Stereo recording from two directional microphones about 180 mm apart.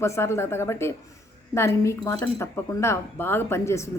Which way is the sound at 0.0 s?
15° left (ahead or behind).